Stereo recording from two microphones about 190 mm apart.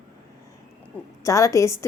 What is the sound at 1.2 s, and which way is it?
Speech, 15° left (ahead or behind).